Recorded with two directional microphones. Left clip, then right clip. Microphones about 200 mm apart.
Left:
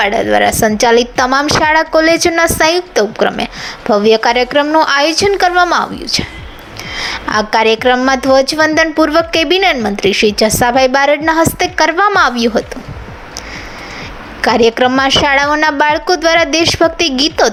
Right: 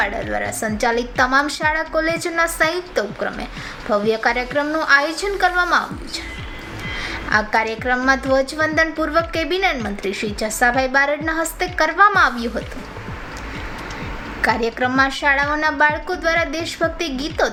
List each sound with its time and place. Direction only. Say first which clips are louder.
0.0 s a woman's voice: left 11 dB; 35° left (ahead or behind)
14.4 s a woman's voice: left 9 dB; 35° left (ahead or behind)